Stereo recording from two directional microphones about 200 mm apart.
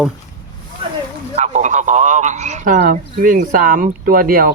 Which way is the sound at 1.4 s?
35° right (ahead or behind).